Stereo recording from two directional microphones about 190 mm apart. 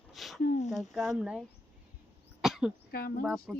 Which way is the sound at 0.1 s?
Centre (ahead or behind).